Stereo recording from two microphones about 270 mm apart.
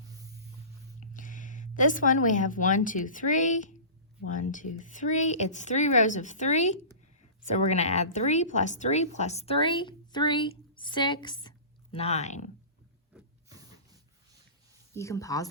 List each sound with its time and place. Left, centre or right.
1.1 s a sound: left
1.7 s speech: left
14.9 s speech: centre